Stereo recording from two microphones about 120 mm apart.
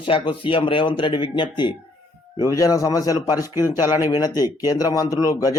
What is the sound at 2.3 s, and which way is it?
A man's voice, 30° left (ahead or behind).